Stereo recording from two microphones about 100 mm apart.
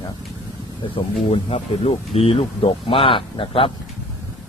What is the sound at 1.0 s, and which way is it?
Speech, 55° left (ahead or behind).